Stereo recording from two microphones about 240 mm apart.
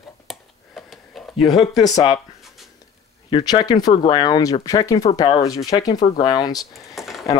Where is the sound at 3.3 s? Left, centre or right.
Centre.